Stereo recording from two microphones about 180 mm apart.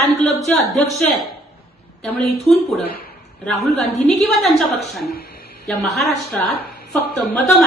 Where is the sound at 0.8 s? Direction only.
35° left (ahead or behind).